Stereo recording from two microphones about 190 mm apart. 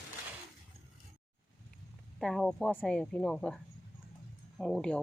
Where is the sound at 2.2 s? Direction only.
Centre (ahead or behind).